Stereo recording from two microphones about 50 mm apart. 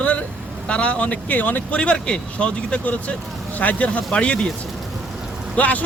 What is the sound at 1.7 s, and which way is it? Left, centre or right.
Speech, left.